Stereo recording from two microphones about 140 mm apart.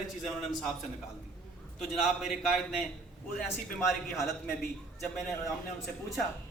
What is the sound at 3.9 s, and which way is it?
Speech, centre (ahead or behind).